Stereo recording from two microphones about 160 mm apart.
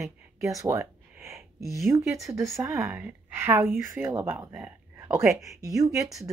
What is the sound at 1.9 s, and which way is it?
Speech, 15° right (ahead or behind).